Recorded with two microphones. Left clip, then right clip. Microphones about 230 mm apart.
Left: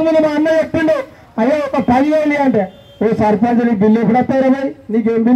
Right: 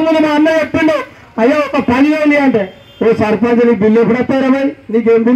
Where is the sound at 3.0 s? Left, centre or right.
Left.